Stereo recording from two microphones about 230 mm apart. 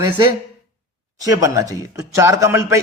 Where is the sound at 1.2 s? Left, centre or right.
Centre.